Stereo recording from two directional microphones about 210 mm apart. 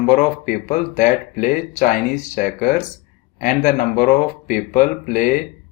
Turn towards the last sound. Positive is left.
turn(degrees=40)  # may be behind; listen again after turning